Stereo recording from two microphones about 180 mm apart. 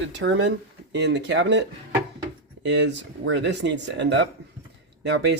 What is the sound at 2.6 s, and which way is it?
Speech, 80° right.